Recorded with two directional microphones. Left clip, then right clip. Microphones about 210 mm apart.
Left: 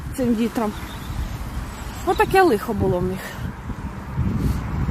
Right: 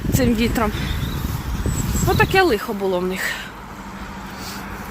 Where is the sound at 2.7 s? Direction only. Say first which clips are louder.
Right 1 dB; 15° left (ahead or behind).